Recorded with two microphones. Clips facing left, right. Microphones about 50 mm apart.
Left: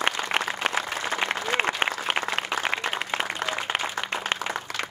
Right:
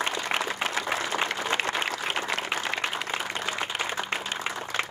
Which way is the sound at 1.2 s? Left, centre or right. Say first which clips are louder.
Left 2 dB; left.